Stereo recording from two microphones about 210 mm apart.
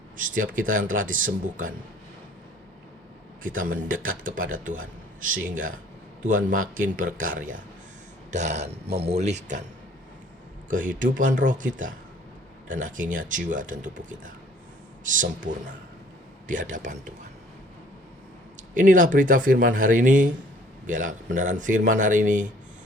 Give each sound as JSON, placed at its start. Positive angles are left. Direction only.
{"t": 0.2, "sound": "a man's voice", "side_deg": -40}
{"t": 3.4, "sound": "a man's voice", "side_deg": -40}
{"t": 10.7, "sound": "a man's voice", "side_deg": -40}
{"t": 18.7, "sound": "a man's voice", "side_deg": -40}